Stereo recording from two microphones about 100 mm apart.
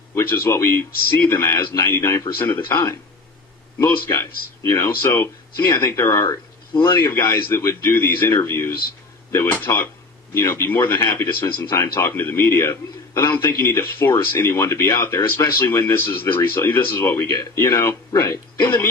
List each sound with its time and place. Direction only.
0.1 s speech: 25° left (ahead or behind)